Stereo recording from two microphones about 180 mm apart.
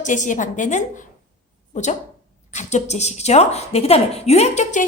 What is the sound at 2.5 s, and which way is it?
A woman's voice, 40° left (ahead or behind).